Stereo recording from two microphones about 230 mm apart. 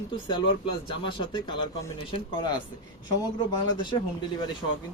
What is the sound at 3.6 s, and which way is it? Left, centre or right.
Speech, centre.